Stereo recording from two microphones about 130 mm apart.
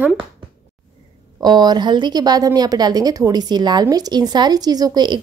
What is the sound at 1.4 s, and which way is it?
Speech, 30° right (ahead or behind).